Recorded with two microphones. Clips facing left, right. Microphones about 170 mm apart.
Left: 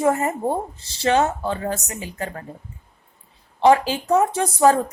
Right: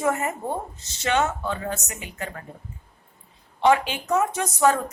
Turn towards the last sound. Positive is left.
turn(degrees=35)  # may be behind; listen again after turning